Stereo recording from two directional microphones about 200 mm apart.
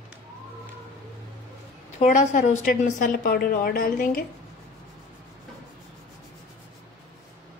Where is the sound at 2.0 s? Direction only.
35° left (ahead or behind).